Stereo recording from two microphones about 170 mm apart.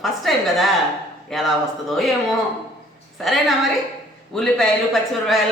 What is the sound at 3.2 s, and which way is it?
Speech, centre (ahead or behind).